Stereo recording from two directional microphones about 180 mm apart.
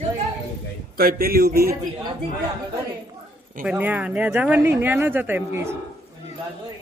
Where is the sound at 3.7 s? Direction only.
10° right (ahead or behind).